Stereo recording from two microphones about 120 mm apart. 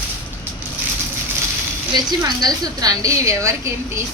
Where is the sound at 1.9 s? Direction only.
35° right (ahead or behind).